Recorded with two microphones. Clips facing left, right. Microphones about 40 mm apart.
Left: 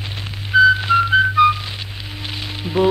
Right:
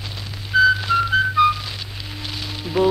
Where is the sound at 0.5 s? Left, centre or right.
Centre.